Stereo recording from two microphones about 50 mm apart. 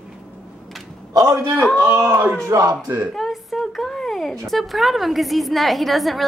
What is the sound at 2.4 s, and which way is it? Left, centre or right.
Speech, right.